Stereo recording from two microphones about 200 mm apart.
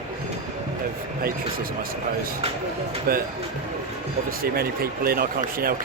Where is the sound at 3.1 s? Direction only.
50° right (ahead or behind).